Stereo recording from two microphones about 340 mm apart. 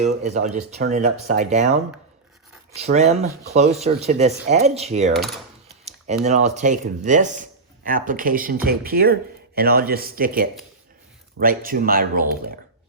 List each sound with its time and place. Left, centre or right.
0.0 s speech: centre
2.7 s speech: centre
5.1 s a sound: centre
6.2 s speech: centre